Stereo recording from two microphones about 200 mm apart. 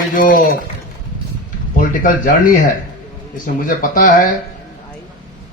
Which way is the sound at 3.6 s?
45° left (ahead or behind).